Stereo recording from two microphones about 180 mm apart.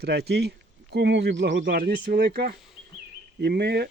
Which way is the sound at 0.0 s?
65° right (ahead or behind).